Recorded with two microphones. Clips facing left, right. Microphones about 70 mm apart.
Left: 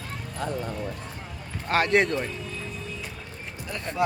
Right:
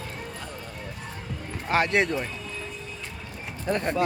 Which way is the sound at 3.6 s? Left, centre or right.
Right.